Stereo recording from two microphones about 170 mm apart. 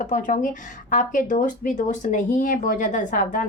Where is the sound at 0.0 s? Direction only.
50° left (ahead or behind).